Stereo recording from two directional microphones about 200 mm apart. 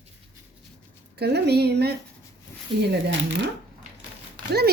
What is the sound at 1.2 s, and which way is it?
Speech, 55° right (ahead or behind).